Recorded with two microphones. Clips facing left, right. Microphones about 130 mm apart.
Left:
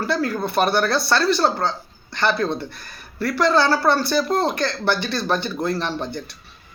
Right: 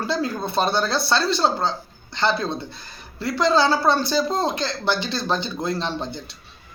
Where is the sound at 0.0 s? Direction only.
20° right (ahead or behind).